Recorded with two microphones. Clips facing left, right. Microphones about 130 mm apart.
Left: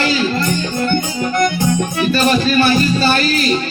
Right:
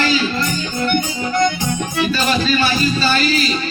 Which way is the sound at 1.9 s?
55° left (ahead or behind).